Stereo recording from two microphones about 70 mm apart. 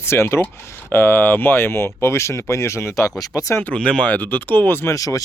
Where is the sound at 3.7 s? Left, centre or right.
Centre; by 4.9 s left.